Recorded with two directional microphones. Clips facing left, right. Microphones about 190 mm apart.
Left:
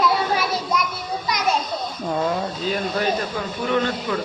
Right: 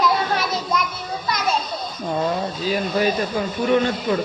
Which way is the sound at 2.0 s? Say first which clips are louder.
Right 1 dB; centre (ahead or behind).